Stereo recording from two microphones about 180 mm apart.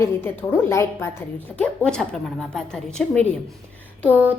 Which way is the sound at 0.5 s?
15° left (ahead or behind).